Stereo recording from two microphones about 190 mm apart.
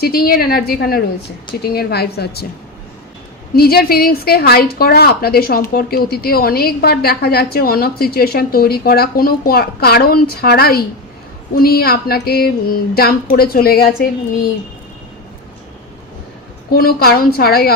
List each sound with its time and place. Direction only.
0.0 s a woman's voice: 55° left (ahead or behind)
3.5 s a woman's voice: 55° left (ahead or behind)
16.7 s a woman's voice: 55° left (ahead or behind)